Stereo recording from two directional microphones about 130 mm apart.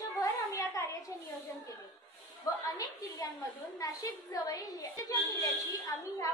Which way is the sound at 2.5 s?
25° left (ahead or behind).